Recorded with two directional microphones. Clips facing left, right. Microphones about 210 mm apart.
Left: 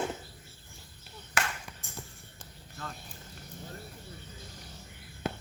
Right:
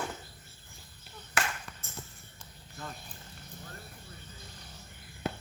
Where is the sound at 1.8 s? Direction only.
15° left (ahead or behind).